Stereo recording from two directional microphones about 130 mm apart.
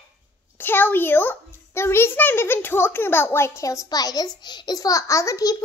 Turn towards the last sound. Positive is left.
turn(degrees=25)  # may be behind; listen again after turning